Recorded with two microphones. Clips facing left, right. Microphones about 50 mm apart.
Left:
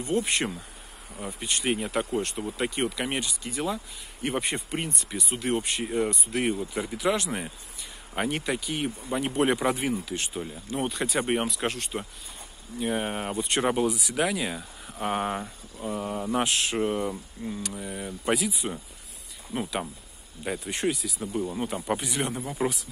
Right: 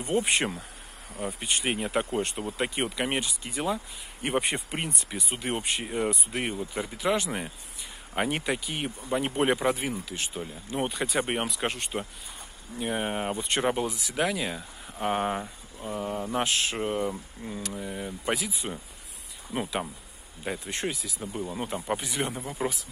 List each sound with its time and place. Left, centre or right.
0.0 s speech: centre
17.0 s speech: centre
17.5 s speech: centre
19.5 s speech: centre
20.4 s speech: centre